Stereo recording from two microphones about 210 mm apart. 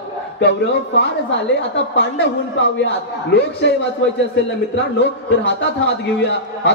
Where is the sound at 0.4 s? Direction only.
55° left (ahead or behind).